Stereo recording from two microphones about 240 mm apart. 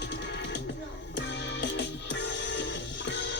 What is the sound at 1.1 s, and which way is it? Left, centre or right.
Music, left.